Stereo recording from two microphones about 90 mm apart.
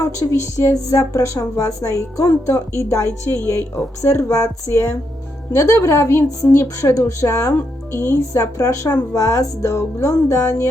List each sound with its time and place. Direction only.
0.0 s a woman's voice: 35° left (ahead or behind)